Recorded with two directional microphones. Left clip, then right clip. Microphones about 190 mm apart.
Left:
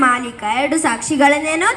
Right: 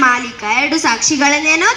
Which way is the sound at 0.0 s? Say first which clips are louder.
Right 2 dB; 35° left (ahead or behind).